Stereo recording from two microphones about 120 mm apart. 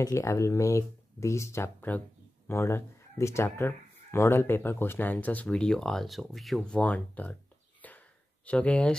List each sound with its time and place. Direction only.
0.0 s speech: 25° left (ahead or behind)
7.8 s a sound: 15° left (ahead or behind)
8.5 s speech: 10° left (ahead or behind)